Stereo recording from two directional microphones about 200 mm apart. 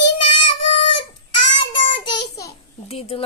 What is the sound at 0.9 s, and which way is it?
Child singing, 25° left (ahead or behind).